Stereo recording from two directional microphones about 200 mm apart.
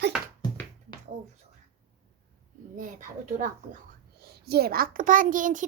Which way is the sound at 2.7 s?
40° right (ahead or behind).